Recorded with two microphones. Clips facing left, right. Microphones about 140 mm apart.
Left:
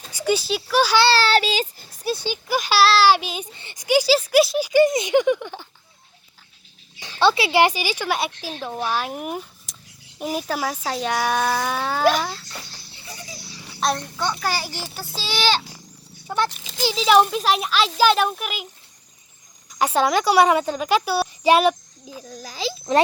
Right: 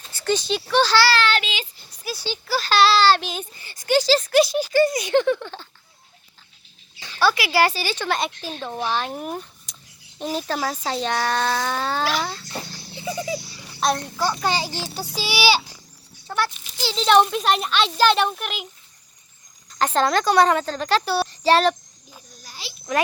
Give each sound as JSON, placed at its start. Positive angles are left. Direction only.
{"t": 0.1, "sound": "speech", "side_deg": 10}
{"t": 0.9, "sound": "child singing", "side_deg": 30}
{"t": 2.1, "sound": "speech", "side_deg": 15}
{"t": 3.5, "sound": "speech", "side_deg": 25}
{"t": 4.7, "sound": "speech", "side_deg": 20}
{"t": 7.0, "sound": "speech", "side_deg": 25}
{"t": 13.7, "sound": "speech", "side_deg": 0}
{"t": 14.4, "sound": "a child's voice", "side_deg": -20}
{"t": 16.2, "sound": "speech", "side_deg": 20}
{"t": 16.8, "sound": "speech", "side_deg": 5}
{"t": 19.8, "sound": "a child's voice", "side_deg": 10}
{"t": 22.9, "sound": "a child's voice", "side_deg": 30}